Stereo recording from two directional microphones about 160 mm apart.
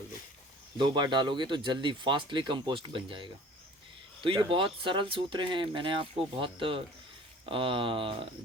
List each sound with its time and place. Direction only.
0.8 s speech: 30° right (ahead or behind)